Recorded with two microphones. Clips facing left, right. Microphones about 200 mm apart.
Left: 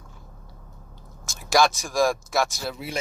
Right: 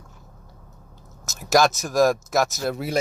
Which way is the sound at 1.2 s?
45° right (ahead or behind).